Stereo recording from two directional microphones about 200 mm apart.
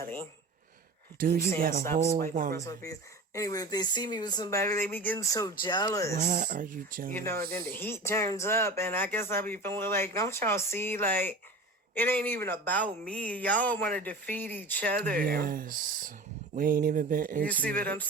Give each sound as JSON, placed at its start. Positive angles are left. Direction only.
{"t": 1.2, "sound": "speech", "side_deg": -45}
{"t": 2.6, "sound": "speech", "side_deg": 15}
{"t": 6.2, "sound": "speech", "side_deg": -45}
{"t": 7.1, "sound": "speech", "side_deg": 10}
{"t": 7.3, "sound": "speech", "side_deg": -45}
{"t": 7.8, "sound": "speech", "side_deg": 10}
{"t": 14.9, "sound": "speech", "side_deg": -45}
{"t": 17.5, "sound": "speech", "side_deg": 5}